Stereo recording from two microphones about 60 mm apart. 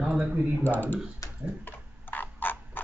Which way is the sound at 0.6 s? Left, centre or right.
Left.